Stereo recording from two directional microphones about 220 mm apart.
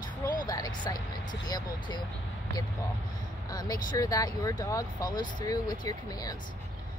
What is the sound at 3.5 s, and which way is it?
Speech, 15° left (ahead or behind).